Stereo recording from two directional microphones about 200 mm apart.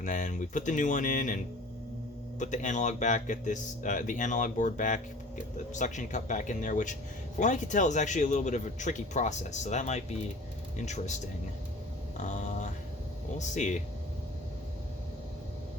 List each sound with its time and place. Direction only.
0.0 s a man's voice: 40° left (ahead or behind)
2.4 s a man's voice: 40° left (ahead or behind)
12.1 s a sound: 35° left (ahead or behind)
13.4 s a man's voice: 35° left (ahead or behind)